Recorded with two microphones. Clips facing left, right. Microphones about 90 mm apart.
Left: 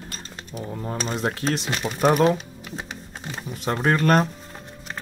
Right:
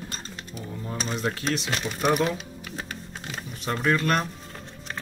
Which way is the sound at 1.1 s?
30° left (ahead or behind).